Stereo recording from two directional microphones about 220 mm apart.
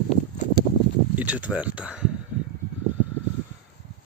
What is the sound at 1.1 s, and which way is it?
Speech, 5° right (ahead or behind).